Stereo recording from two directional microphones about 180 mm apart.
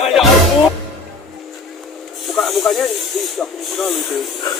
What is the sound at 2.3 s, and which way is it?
Speech, centre (ahead or behind).